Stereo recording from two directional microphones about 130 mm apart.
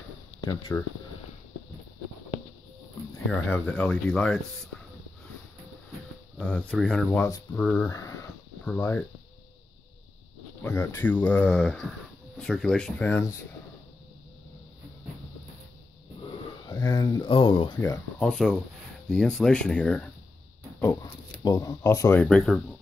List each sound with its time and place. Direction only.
0.4 s speech: 35° left (ahead or behind)
3.3 s speech: 15° left (ahead or behind)
6.3 s speech: 10° left (ahead or behind)
10.6 s speech: 15° left (ahead or behind)
16.3 s a sound: 30° left (ahead or behind)
17.3 s speech: 40° left (ahead or behind)
17.7 s speech: 25° left (ahead or behind)
18.2 s speech: 5° left (ahead or behind)
21.0 s speech: 30° left (ahead or behind)
22.2 s speech: 5° left (ahead or behind)